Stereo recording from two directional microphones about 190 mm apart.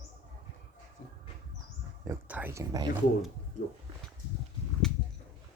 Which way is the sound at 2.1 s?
10° right (ahead or behind).